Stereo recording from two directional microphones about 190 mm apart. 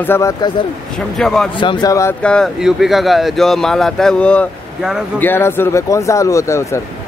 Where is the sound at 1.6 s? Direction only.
25° left (ahead or behind).